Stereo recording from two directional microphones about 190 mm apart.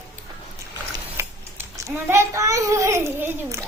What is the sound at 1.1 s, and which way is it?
A child's voice, 15° right (ahead or behind).